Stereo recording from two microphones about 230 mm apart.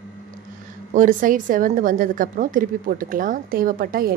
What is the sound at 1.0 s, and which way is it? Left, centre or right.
A woman's voice, right.